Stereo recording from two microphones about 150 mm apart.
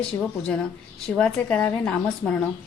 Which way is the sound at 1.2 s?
5° left (ahead or behind).